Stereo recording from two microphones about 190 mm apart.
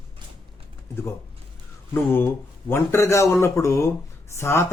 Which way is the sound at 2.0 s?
10° left (ahead or behind).